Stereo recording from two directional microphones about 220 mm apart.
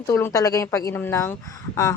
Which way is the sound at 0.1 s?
10° left (ahead or behind).